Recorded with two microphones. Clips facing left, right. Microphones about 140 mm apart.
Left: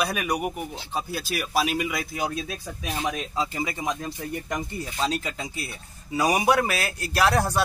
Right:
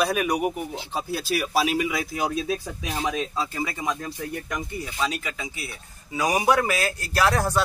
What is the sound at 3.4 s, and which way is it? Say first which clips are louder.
Speech: left 1 dB; 20° left (ahead or behind).